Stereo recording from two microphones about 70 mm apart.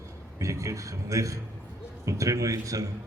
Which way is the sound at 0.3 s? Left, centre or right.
Right.